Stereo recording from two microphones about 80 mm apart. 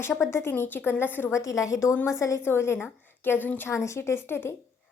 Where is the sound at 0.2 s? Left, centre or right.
Left.